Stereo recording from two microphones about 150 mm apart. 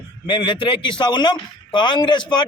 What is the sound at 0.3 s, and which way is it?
A man's voice, 30° left (ahead or behind).